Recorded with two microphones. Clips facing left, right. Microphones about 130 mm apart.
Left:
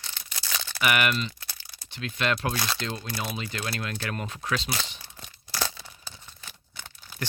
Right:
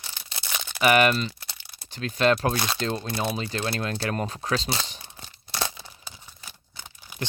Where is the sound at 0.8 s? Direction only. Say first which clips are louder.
Right 6 dB; 35° right (ahead or behind).